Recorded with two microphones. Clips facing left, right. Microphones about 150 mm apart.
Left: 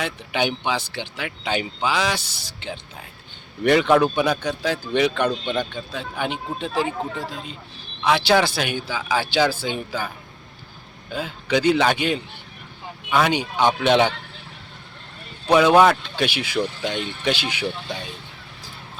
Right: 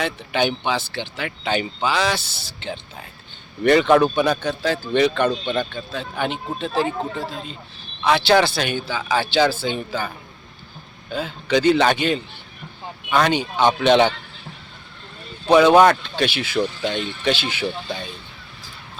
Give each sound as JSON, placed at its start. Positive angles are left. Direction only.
{"t": 0.0, "sound": "speech", "side_deg": 10}
{"t": 11.1, "sound": "speech", "side_deg": 10}
{"t": 15.4, "sound": "speech", "side_deg": 5}